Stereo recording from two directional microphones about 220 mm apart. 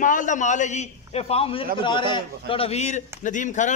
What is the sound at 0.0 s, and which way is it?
A man's voice, 35° left (ahead or behind).